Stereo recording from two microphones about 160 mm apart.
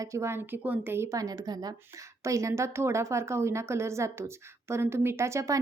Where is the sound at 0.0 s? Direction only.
20° right (ahead or behind).